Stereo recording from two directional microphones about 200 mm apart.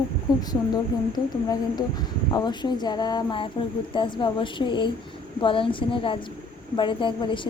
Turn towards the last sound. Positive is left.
turn(degrees=25)  # may be behind; listen again after turning